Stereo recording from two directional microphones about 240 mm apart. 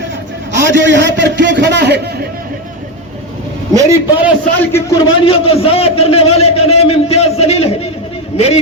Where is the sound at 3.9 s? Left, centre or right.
Centre.